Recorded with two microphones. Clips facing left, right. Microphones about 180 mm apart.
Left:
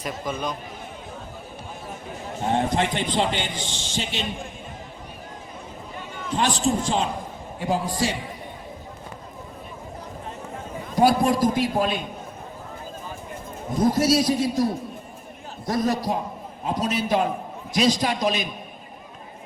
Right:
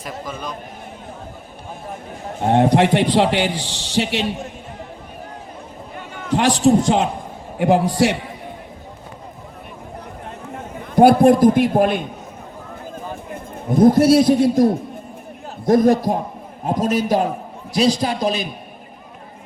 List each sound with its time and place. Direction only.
0.0 s a man's voice: centre (ahead or behind)
2.5 s a man's voice: 65° right (ahead or behind)
6.0 s a man's voice: 60° right (ahead or behind)
10.9 s a man's voice: 55° right (ahead or behind)
13.3 s a man's voice: 55° right (ahead or behind); by 18.4 s 35° right (ahead or behind)